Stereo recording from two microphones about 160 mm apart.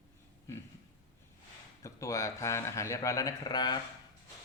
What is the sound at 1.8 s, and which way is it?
Speech, 20° left (ahead or behind).